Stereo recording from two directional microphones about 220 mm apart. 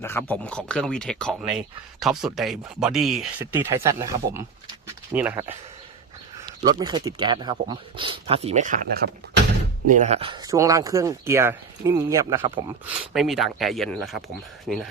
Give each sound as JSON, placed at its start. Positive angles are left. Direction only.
{"t": 0.0, "sound": "speech", "side_deg": 10}
{"t": 6.7, "sound": "speech", "side_deg": -20}
{"t": 9.8, "sound": "speech", "side_deg": -35}
{"t": 13.1, "sound": "speech", "side_deg": 0}